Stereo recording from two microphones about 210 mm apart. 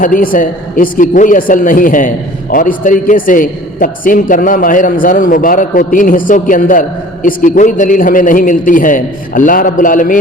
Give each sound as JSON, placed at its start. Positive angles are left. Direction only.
{"t": 0.0, "sound": "a man's voice", "side_deg": 40}